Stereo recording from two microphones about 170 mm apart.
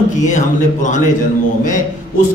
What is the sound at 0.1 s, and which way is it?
A man's voice, 45° left (ahead or behind).